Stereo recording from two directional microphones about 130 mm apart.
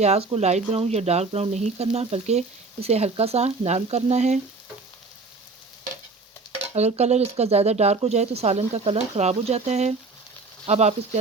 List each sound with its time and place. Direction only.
0.0 s speech: 55° right (ahead or behind)
6.7 s speech: 60° right (ahead or behind)